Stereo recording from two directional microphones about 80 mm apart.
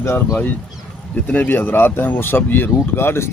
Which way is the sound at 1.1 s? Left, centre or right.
Centre.